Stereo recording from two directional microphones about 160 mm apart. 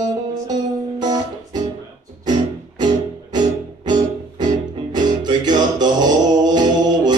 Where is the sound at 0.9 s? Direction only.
25° right (ahead or behind).